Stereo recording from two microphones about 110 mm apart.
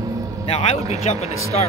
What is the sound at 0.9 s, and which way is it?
Speech, 75° left (ahead or behind).